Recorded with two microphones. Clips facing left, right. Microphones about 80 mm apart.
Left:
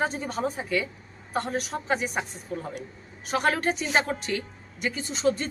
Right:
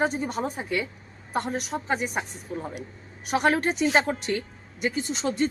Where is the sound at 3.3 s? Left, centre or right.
Centre.